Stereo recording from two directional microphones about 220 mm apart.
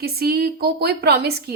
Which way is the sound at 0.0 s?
45° right (ahead or behind).